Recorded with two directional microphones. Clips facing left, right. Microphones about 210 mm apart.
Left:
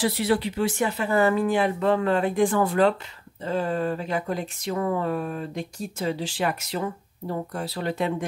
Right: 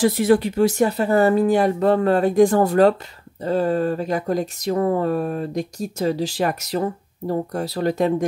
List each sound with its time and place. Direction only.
0.0 s speech: 45° right (ahead or behind)